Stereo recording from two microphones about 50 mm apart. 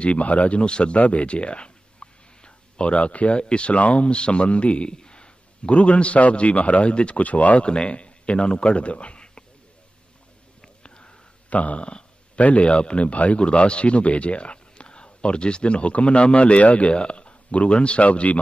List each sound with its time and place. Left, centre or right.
0.0 s speech: left
10.8 s a sound: centre
11.5 s a man's voice: left